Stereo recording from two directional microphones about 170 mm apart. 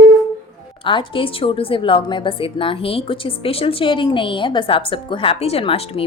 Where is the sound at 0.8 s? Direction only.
30° left (ahead or behind).